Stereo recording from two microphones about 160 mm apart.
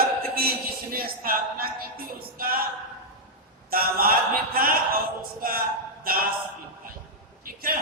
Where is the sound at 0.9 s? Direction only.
65° right (ahead or behind).